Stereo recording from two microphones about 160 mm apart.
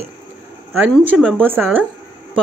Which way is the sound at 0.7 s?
10° right (ahead or behind).